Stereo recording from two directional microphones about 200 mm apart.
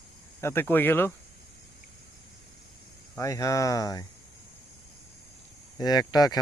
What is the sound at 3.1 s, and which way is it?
Speech, 15° left (ahead or behind).